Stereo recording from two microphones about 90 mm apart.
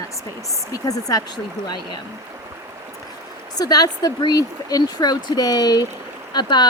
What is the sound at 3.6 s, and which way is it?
Speech, 45° left (ahead or behind).